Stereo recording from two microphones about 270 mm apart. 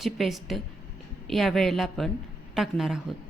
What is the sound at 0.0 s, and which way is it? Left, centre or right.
A woman's voice, centre.